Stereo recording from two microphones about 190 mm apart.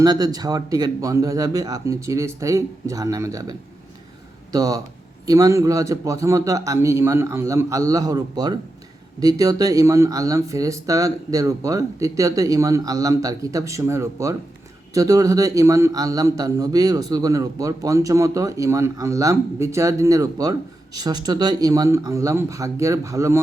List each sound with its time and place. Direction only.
0.0 s a man's voice: 20° right (ahead or behind)
4.5 s a man's voice: 20° right (ahead or behind)